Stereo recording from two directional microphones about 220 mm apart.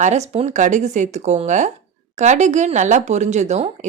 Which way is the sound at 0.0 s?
30° right (ahead or behind).